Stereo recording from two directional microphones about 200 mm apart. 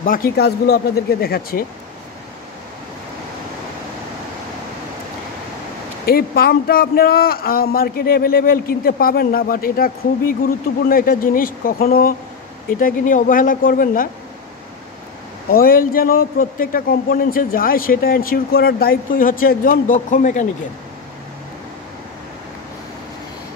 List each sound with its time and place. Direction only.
0.0 s a man's voice: 45° left (ahead or behind)
6.0 s a man's voice: 50° left (ahead or behind)
15.5 s a man's voice: 45° left (ahead or behind)